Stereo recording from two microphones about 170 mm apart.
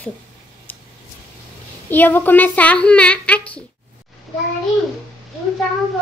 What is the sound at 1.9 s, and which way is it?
Speech, 10° left (ahead or behind).